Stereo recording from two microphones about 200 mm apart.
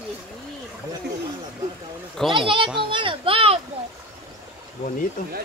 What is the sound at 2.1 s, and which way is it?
Speech, centre (ahead or behind).